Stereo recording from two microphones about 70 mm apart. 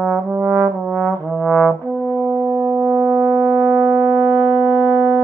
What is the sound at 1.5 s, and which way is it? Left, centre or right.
Brass instrument, left.